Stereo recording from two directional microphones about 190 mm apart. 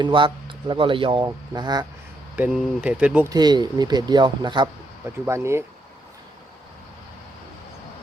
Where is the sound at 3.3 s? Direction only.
20° right (ahead or behind).